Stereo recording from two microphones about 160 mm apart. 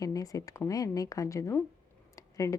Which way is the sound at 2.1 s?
20° left (ahead or behind).